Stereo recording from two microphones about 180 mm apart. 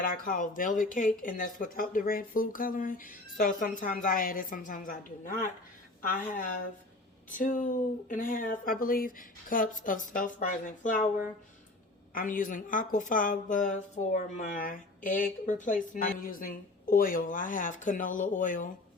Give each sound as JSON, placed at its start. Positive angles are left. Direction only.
{"t": 0.0, "sound": "speech", "side_deg": 50}
{"t": 12.1, "sound": "speech", "side_deg": 50}